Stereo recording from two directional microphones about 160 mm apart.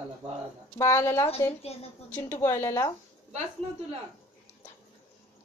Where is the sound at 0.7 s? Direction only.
15° left (ahead or behind).